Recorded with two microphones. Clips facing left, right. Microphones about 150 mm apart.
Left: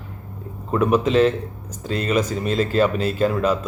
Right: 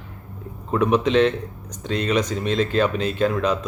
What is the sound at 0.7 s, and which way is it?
Speech, 5° left (ahead or behind).